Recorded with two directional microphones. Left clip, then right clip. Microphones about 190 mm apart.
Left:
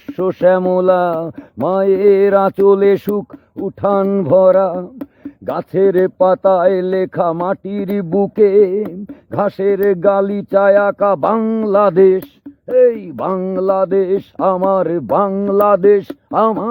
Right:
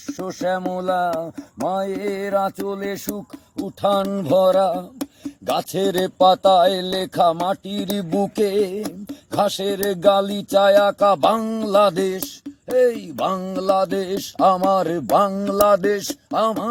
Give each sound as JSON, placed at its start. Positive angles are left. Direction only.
{"t": 0.3, "sound": "mantra", "side_deg": 35}
{"t": 3.6, "sound": "music", "side_deg": 25}
{"t": 13.3, "sound": "music", "side_deg": 25}
{"t": 14.3, "sound": "speech", "side_deg": 15}
{"t": 15.3, "sound": "mantra", "side_deg": 30}
{"t": 15.5, "sound": "music", "side_deg": 25}